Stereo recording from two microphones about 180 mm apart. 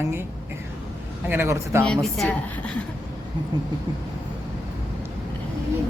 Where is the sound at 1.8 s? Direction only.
5° left (ahead or behind).